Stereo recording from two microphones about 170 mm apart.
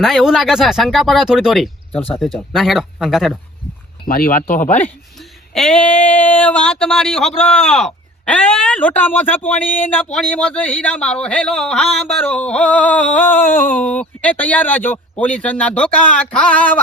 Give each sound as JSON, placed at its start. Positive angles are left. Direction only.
{"t": 0.0, "sound": "speech", "side_deg": 0}
{"t": 2.0, "sound": "speech", "side_deg": 10}
{"t": 2.5, "sound": "speech", "side_deg": 0}
{"t": 4.1, "sound": "speech", "side_deg": 55}
{"t": 5.5, "sound": "speech", "side_deg": 5}